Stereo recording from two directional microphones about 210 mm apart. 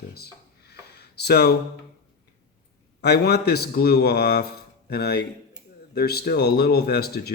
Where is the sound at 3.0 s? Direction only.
50° left (ahead or behind).